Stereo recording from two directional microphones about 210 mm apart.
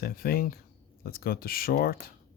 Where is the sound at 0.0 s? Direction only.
45° left (ahead or behind).